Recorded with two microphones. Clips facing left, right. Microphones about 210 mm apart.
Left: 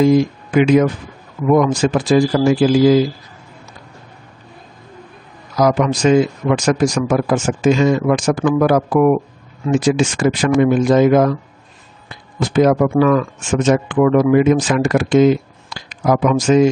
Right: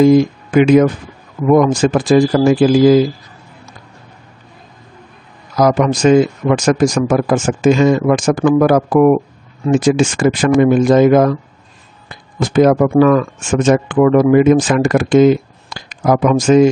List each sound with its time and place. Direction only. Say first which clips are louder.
0.0 s speech: right 3 dB; 50° right (ahead or behind)
5.6 s speech: right 2 dB; 45° right (ahead or behind)